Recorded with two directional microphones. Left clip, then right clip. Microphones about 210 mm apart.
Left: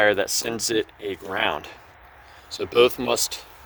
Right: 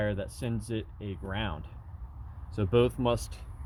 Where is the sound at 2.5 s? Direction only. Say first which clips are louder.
Left 8 dB; 20° left (ahead or behind).